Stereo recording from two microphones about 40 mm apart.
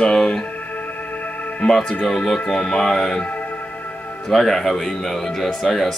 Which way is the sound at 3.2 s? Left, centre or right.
Left.